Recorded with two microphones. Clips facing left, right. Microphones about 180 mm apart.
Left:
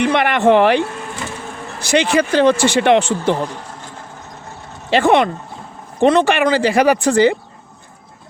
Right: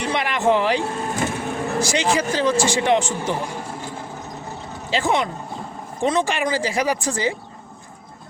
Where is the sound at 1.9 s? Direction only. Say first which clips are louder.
Left 10 dB; 60° left (ahead or behind).